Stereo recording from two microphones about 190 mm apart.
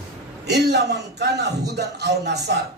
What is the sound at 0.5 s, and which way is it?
A man's voice, 60° right (ahead or behind).